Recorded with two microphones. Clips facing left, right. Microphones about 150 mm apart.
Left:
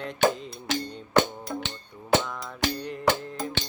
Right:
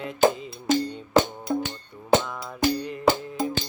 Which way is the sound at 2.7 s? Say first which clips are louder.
Right 3 dB; centre (ahead or behind).